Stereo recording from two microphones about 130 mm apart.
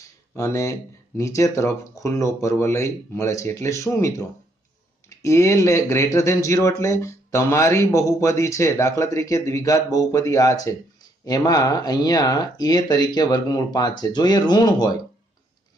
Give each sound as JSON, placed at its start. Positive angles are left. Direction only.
{"t": 0.4, "sound": "speech", "side_deg": 25}